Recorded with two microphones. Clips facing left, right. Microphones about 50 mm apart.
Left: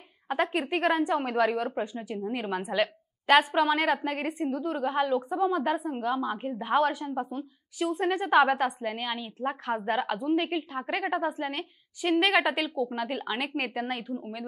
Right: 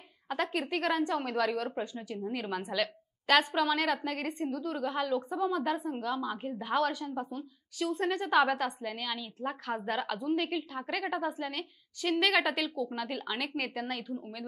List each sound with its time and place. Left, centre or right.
0.3 s a woman's voice: left